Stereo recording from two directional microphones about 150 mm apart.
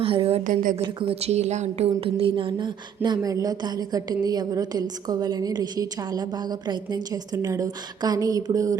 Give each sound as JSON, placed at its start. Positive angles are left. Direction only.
{"t": 0.0, "sound": "a woman's voice", "side_deg": -40}
{"t": 0.4, "sound": "speech", "side_deg": -60}
{"t": 0.9, "sound": "a woman's voice", "side_deg": -40}